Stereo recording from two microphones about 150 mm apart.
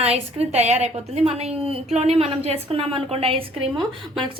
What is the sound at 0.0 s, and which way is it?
A woman's voice, 45° right (ahead or behind).